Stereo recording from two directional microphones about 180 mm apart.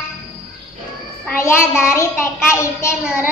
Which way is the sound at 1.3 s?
15° left (ahead or behind).